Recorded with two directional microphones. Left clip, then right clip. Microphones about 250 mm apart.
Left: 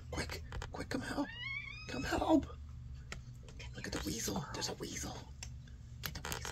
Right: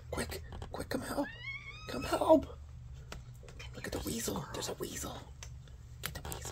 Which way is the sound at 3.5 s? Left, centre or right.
Right.